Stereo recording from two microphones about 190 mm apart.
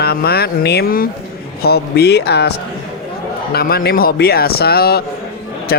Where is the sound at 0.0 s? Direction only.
55° left (ahead or behind).